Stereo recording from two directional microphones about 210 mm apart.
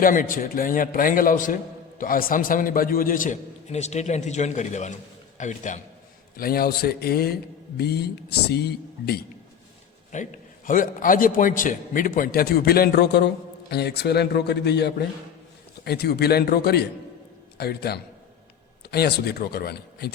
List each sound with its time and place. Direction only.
0.0 s a man's voice: 40° left (ahead or behind)
10.1 s a man's voice: 35° left (ahead or behind)